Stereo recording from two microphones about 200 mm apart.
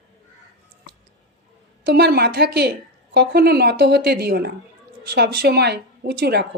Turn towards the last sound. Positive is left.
turn(degrees=-50)  # may be behind; listen again after turning